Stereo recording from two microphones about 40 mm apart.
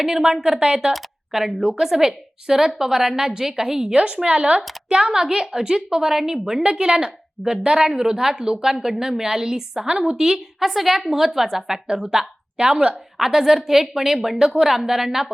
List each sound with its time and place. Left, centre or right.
0.0 s a woman's voice: centre
1.3 s a woman's voice: centre
3.9 s a woman's voice: right
12.9 s a woman's voice: centre